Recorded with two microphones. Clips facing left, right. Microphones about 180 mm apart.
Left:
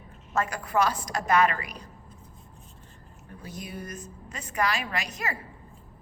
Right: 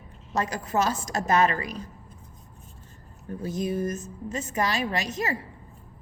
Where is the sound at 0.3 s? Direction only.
20° right (ahead or behind).